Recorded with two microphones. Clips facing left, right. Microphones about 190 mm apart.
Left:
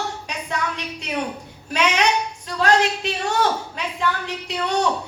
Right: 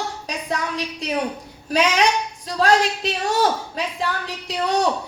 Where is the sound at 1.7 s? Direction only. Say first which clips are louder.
Right 2 dB; 35° right (ahead or behind).